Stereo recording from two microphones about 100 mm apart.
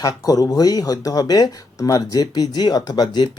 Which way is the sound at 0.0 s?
40° left (ahead or behind).